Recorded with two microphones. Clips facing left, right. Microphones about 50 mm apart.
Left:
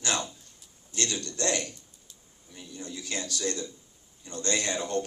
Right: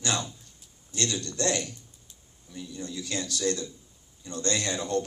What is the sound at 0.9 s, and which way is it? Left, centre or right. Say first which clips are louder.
Speech: right 2 dB; left.